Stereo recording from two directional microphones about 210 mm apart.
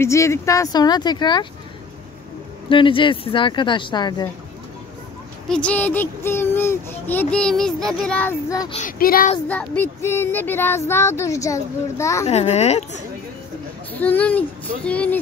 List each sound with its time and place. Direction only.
0.0 s speech: 15° left (ahead or behind)
2.7 s speech: 25° left (ahead or behind)
5.5 s a child's voice: 5° left (ahead or behind)
8.7 s speech: 40° left (ahead or behind)
9.5 s a child's voice: 10° left (ahead or behind)
12.3 s speech: 30° left (ahead or behind)
13.9 s a child's voice: 10° left (ahead or behind)